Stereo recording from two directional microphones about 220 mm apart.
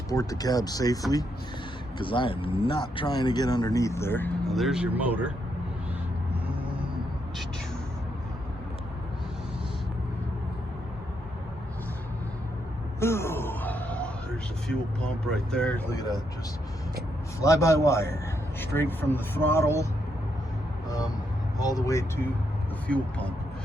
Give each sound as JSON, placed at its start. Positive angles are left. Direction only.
{"t": 0.1, "sound": "speech", "side_deg": 15}
{"t": 2.0, "sound": "speech", "side_deg": 20}
{"t": 13.0, "sound": "a sound", "side_deg": 10}
{"t": 14.7, "sound": "speech", "side_deg": 5}
{"t": 16.0, "sound": "speech", "side_deg": 15}
{"t": 17.4, "sound": "speech", "side_deg": 15}
{"t": 21.6, "sound": "speech", "side_deg": 15}